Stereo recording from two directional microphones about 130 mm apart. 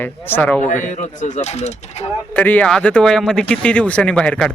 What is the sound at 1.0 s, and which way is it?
Speech, 75° left (ahead or behind).